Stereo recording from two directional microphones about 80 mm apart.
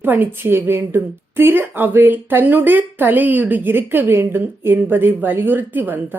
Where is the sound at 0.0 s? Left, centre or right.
Right.